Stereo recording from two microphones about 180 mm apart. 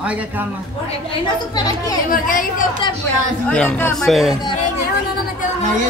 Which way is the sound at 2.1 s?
50° left (ahead or behind).